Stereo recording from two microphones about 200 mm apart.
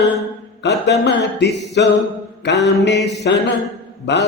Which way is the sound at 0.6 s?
60° left (ahead or behind).